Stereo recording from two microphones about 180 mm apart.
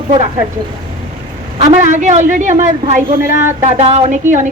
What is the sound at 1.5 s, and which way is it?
Speech, 40° right (ahead or behind).